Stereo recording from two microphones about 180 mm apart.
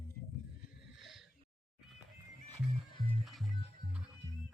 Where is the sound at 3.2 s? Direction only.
Centre (ahead or behind).